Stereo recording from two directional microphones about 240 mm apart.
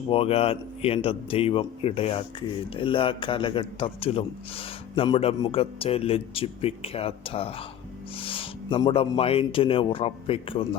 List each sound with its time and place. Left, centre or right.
0.1 s a man's voice: left